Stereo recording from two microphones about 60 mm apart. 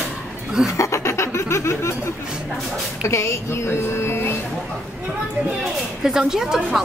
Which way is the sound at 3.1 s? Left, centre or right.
Left.